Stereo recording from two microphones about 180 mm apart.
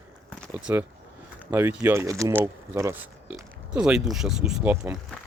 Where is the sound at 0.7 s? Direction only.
15° right (ahead or behind).